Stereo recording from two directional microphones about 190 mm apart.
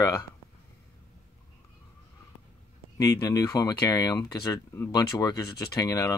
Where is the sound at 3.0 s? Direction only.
20° left (ahead or behind).